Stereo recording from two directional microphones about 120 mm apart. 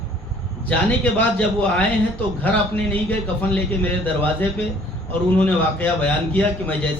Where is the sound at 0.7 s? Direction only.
10° left (ahead or behind).